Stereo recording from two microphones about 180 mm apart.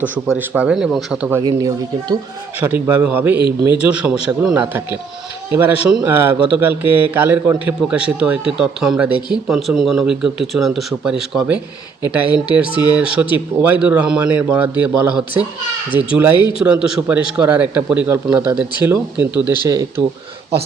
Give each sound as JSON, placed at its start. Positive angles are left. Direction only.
{"t": 0.3, "sound": "a man's voice", "side_deg": -10}
{"t": 1.4, "sound": "speech", "side_deg": -25}
{"t": 2.6, "sound": "a man's voice", "side_deg": -10}
{"t": 15.9, "sound": "a man's voice", "side_deg": -10}
{"t": 19.6, "sound": "a man's voice", "side_deg": -20}